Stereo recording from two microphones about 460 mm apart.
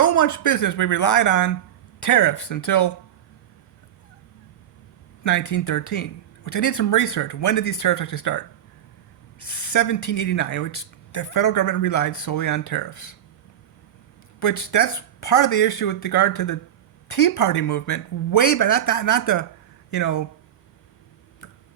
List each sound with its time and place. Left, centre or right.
0.0 s speech: left
5.2 s speech: left
14.3 s speech: left